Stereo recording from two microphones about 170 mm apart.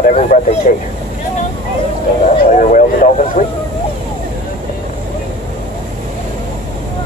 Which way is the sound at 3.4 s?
55° left (ahead or behind).